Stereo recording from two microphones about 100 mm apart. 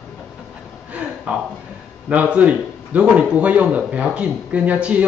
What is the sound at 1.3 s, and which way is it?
Speech, 10° right (ahead or behind).